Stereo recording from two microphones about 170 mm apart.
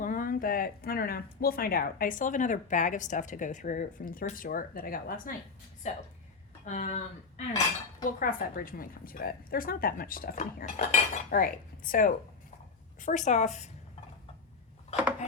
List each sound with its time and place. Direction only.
0.0 s speech: 50° left (ahead or behind)
5.8 s a woman's voice: 40° left (ahead or behind)
8.0 s a woman's voice: 55° left (ahead or behind)